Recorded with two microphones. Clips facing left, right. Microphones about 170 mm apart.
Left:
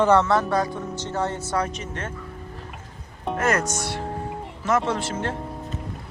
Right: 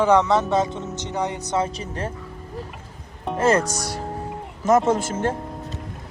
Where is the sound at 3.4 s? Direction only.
30° right (ahead or behind); by 5.3 s 45° right (ahead or behind).